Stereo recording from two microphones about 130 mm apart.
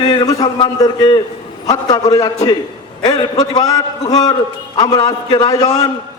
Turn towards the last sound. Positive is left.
turn(degrees=30)  # may be behind; listen again after turning